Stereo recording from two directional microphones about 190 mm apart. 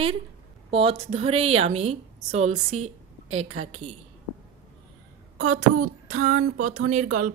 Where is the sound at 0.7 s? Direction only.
30° right (ahead or behind).